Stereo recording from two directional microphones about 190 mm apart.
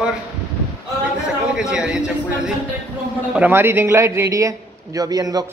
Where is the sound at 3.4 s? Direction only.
10° right (ahead or behind).